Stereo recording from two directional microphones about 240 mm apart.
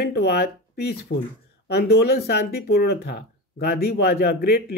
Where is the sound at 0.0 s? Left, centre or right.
Left.